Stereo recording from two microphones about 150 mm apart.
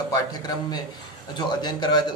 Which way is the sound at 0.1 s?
25° left (ahead or behind).